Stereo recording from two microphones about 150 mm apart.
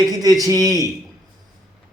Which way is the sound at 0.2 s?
25° right (ahead or behind).